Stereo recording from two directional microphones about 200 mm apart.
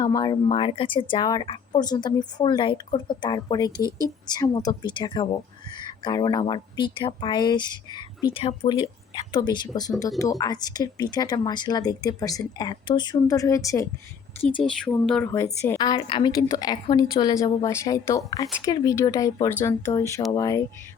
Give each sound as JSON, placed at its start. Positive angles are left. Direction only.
{"t": 0.0, "sound": "speech", "side_deg": 20}
{"t": 3.8, "sound": "speech", "side_deg": -20}
{"t": 4.3, "sound": "speech", "side_deg": 20}
{"t": 14.6, "sound": "speech", "side_deg": 5}